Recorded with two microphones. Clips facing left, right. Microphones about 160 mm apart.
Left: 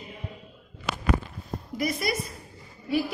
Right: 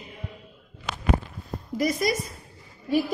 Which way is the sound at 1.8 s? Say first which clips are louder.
Right 4 dB; 40° right (ahead or behind).